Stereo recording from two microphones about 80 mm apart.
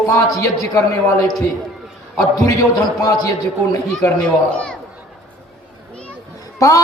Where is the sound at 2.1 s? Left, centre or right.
Left.